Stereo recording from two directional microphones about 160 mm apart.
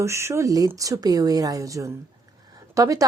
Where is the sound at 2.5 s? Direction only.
20° right (ahead or behind).